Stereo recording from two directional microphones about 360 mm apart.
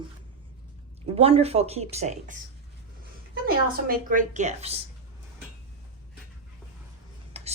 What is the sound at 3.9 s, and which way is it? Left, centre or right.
Speech, right.